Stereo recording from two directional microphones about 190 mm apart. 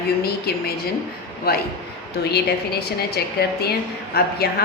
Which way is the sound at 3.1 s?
55° left (ahead or behind).